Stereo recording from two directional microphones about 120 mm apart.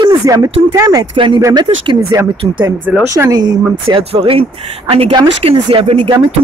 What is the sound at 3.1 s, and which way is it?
Speech, 25° right (ahead or behind).